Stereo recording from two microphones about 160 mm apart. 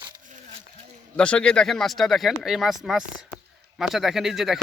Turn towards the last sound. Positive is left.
turn(degrees=0)  # may be behind; listen again after turning